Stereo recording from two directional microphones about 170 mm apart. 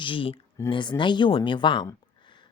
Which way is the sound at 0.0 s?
30° left (ahead or behind).